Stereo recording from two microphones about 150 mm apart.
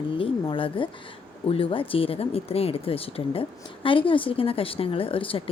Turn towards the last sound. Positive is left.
turn(degrees=35)  # may be behind; listen again after turning